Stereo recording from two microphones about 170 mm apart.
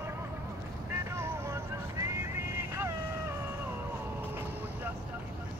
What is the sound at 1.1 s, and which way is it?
Vehicle, 15° right (ahead or behind).